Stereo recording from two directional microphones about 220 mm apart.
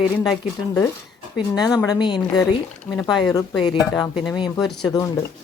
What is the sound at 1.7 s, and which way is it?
Speech, 20° left (ahead or behind).